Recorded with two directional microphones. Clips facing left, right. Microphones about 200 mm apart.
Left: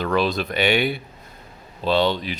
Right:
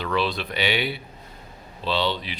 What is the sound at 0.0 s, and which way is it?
Speech, 45° left (ahead or behind).